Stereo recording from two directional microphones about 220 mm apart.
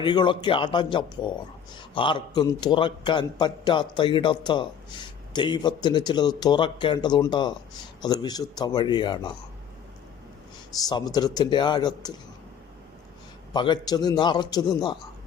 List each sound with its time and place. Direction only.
0.0 s a man's voice: 20° left (ahead or behind)
10.8 s a man's voice: 15° left (ahead or behind)
13.5 s a man's voice: 20° left (ahead or behind)